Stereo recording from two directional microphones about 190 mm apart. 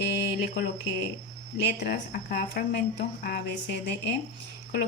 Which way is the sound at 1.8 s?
45° left (ahead or behind).